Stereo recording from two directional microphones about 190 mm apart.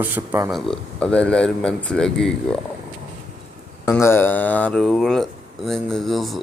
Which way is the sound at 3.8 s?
10° left (ahead or behind).